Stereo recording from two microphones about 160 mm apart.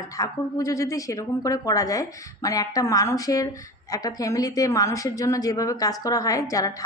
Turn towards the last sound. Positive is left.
turn(degrees=20)  # may be behind; listen again after turning